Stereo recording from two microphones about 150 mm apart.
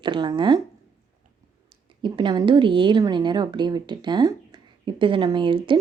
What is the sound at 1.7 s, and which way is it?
Speech, 30° right (ahead or behind).